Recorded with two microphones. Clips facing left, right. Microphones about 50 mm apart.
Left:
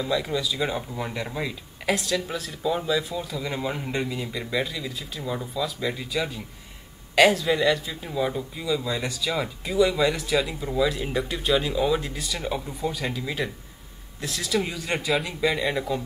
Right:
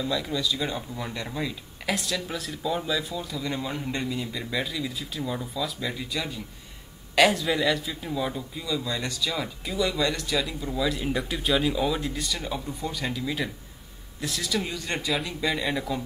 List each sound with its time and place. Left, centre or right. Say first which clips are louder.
0.0 s speech: left 2 dB; centre
1.9 s speech: left 4 dB; centre